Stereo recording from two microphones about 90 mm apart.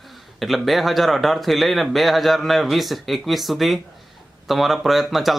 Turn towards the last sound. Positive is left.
turn(degrees=0)  # may be behind; listen again after turning